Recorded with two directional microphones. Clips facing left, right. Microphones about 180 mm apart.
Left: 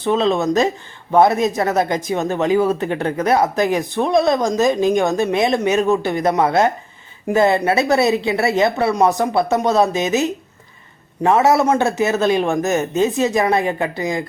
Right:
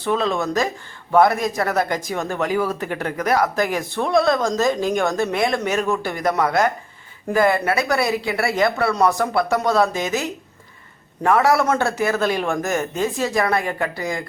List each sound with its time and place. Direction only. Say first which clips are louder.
0.0 s speech: left 4 dB; 20° left (ahead or behind)